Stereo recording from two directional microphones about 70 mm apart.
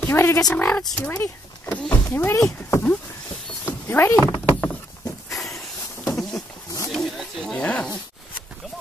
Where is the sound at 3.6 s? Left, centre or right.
Left.